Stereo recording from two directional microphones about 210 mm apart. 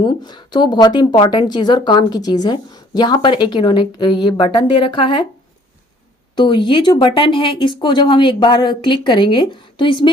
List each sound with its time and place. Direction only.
0.0 s speech: 20° left (ahead or behind)
6.3 s speech: 20° left (ahead or behind)